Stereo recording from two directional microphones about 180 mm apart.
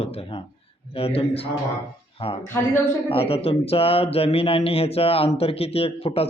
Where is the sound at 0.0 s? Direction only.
35° left (ahead or behind).